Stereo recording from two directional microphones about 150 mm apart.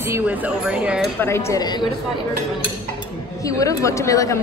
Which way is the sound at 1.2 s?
20° left (ahead or behind).